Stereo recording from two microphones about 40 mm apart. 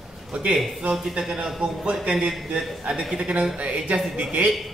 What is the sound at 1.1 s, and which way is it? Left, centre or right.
A man's voice, centre.